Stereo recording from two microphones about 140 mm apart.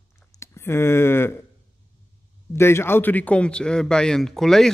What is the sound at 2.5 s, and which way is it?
A man's voice, 15° left (ahead or behind).